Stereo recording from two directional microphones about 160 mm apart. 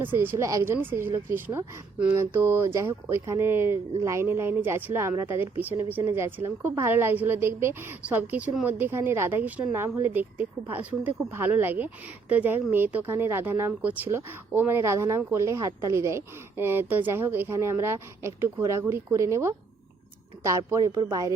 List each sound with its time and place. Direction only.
0.0 s a woman's voice: 10° right (ahead or behind)